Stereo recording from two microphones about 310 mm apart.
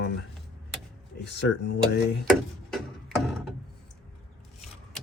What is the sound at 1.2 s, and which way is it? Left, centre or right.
Speech, left.